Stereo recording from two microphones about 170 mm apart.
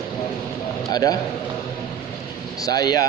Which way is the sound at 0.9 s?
20° left (ahead or behind).